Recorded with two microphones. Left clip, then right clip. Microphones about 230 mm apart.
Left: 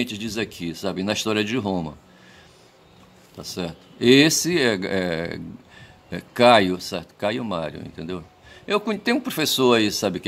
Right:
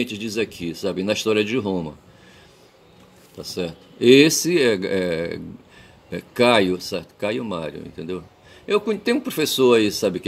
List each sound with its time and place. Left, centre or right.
0.0 s speech: left
3.3 s speech: centre